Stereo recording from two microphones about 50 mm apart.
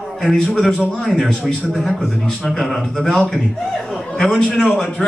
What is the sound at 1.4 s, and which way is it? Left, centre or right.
Speech, centre.